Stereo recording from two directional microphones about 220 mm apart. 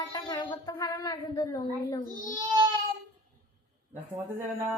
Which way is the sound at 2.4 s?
20° right (ahead or behind).